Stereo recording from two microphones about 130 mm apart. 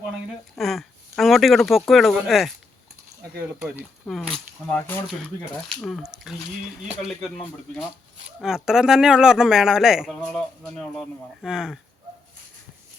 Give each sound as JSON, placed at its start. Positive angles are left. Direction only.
{"t": 0.5, "sound": "speech", "side_deg": 0}
{"t": 4.0, "sound": "speech", "side_deg": 5}